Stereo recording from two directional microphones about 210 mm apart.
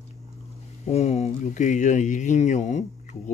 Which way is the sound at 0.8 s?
30° left (ahead or behind).